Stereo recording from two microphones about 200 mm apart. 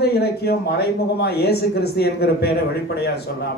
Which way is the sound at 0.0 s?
55° left (ahead or behind).